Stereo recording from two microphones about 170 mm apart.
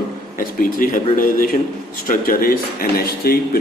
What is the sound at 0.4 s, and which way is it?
A man's voice, 55° left (ahead or behind).